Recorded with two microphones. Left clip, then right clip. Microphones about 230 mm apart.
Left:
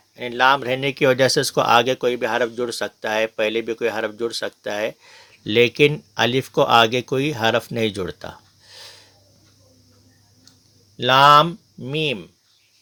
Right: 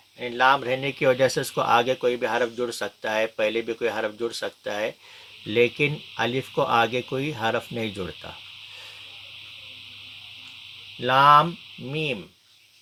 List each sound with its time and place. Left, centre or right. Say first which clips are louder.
0.2 s speech: left 3 dB; left
11.0 s speech: left 4 dB; left